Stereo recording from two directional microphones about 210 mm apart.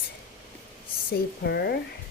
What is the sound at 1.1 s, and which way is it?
Speech, 50° left (ahead or behind).